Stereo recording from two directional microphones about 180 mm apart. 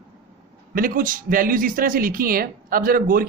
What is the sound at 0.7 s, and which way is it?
Speech, 50° right (ahead or behind).